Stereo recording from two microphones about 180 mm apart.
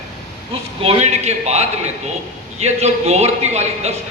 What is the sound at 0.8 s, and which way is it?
Speech, 35° right (ahead or behind).